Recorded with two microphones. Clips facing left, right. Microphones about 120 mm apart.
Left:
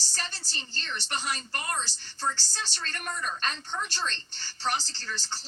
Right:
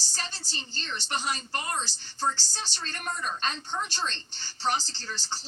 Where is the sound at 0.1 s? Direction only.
20° right (ahead or behind).